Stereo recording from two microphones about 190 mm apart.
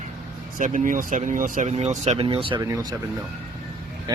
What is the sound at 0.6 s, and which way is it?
Speech, 45° right (ahead or behind).